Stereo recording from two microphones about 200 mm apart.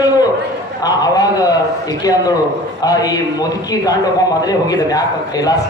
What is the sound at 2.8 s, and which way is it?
Speech, 20° left (ahead or behind).